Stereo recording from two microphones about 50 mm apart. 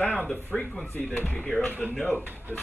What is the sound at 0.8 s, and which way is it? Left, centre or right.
Speech, left.